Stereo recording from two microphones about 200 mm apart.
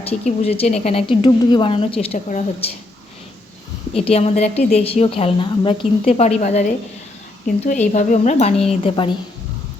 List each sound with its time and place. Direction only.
0.0 s speech: 30° left (ahead or behind)
3.9 s a woman's voice: 30° left (ahead or behind)